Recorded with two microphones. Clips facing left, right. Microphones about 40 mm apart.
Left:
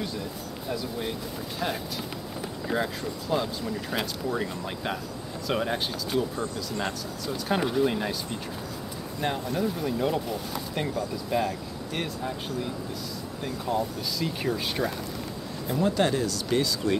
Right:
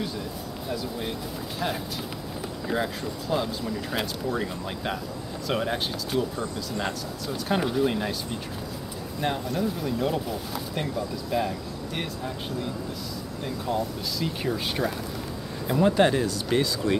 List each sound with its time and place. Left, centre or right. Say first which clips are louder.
0.7 s speech: even; centre
2.7 s speech: even; centre
13.4 s speech: even; centre
15.6 s speech: right 4 dB; right